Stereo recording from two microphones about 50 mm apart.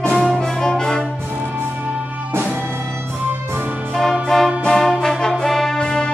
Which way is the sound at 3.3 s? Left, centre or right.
Right.